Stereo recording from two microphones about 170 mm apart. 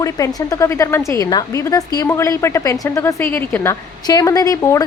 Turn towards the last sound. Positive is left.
turn(degrees=20)  # may be behind; listen again after turning